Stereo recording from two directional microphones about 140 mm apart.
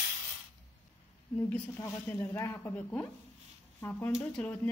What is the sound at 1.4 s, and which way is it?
Speech, 15° left (ahead or behind).